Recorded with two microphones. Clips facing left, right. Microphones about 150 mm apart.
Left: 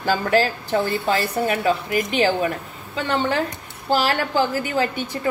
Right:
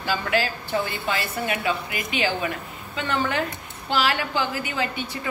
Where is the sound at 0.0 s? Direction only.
40° left (ahead or behind).